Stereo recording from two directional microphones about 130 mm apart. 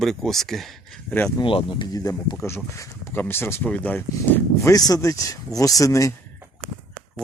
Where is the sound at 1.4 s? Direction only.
40° left (ahead or behind); by 4.7 s 15° left (ahead or behind).